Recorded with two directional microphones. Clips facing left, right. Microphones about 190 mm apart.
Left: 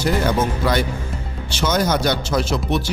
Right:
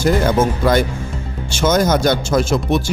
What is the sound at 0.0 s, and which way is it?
A man's voice, 50° right (ahead or behind).